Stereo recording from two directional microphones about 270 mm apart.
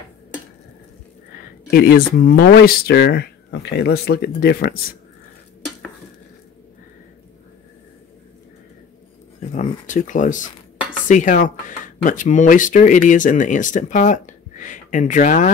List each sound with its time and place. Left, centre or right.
1.7 s speech: left
9.6 s speech: left